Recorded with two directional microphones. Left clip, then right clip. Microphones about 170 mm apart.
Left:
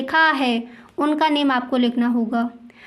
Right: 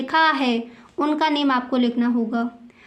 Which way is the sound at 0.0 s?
20° left (ahead or behind).